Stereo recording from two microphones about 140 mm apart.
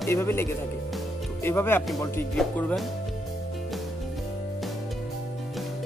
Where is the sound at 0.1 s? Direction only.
15° left (ahead or behind).